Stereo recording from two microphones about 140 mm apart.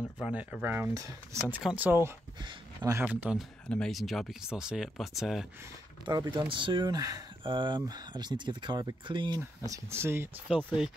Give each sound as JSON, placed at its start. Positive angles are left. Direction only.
{"t": 0.2, "sound": "speech", "side_deg": -10}
{"t": 1.5, "sound": "speech", "side_deg": -10}
{"t": 3.1, "sound": "speech", "side_deg": -10}
{"t": 3.6, "sound": "speech", "side_deg": 5}
{"t": 6.0, "sound": "speech", "side_deg": -30}
{"t": 9.7, "sound": "speech", "side_deg": -20}